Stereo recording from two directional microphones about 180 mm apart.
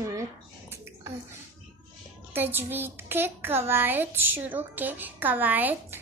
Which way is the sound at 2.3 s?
10° right (ahead or behind).